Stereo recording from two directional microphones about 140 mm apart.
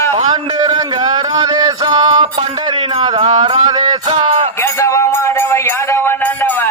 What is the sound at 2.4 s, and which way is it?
Music, 40° right (ahead or behind).